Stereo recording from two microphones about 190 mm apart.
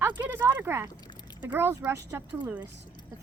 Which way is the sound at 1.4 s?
10° right (ahead or behind).